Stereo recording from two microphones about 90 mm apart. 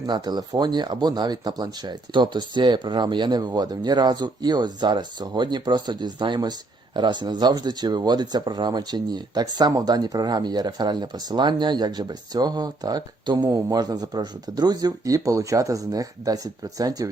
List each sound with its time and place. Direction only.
0.0 s speech: 50° right (ahead or behind)